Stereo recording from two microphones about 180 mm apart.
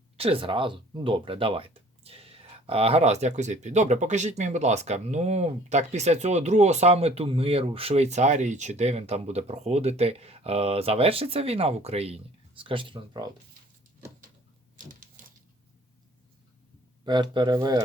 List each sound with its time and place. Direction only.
0.2 s speech: 30° right (ahead or behind)
17.1 s speech: 25° right (ahead or behind)